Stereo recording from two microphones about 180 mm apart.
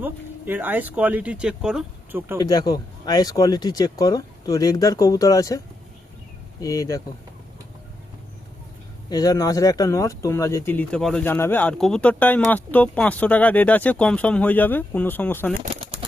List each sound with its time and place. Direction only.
0.0 s speech: 10° right (ahead or behind)
2.4 s speech: 20° left (ahead or behind)
9.0 s speech: 20° left (ahead or behind)
15.7 s bird: 30° right (ahead or behind)